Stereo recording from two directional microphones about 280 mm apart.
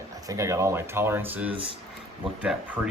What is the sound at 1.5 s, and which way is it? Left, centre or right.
Speech, centre.